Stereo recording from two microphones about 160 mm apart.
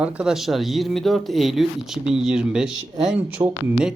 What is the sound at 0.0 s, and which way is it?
Speech, 5° right (ahead or behind).